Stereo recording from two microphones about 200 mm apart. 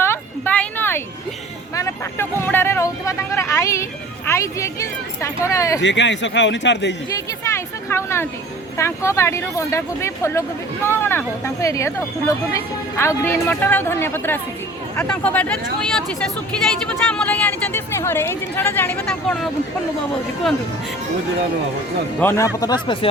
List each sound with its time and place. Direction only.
0.0 s a sound: 10° left (ahead or behind)
1.7 s vehicle: 15° left (ahead or behind)
4.3 s a woman's voice: 15° left (ahead or behind)
5.8 s a man's voice: 60° left (ahead or behind)
7.4 s a sound: 15° left (ahead or behind)
8.8 s a woman's voice: 15° left (ahead or behind)
17.1 s a woman's voice: 5° left (ahead or behind)
22.2 s a woman's voice: 15° left (ahead or behind)